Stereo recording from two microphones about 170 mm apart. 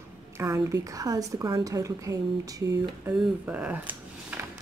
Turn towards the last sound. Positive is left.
turn(degrees=-10)  # may be behind; listen again after turning